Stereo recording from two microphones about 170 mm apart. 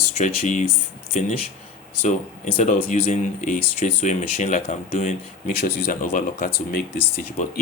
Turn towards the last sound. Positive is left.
turn(degrees=45)  # may be behind; listen again after turning